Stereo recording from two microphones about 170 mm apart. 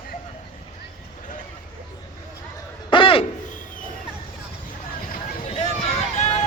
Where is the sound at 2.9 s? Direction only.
30° left (ahead or behind).